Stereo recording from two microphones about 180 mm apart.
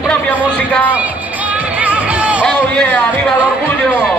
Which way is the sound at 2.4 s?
5° left (ahead or behind).